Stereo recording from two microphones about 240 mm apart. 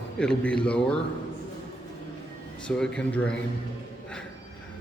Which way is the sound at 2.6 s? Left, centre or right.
Centre.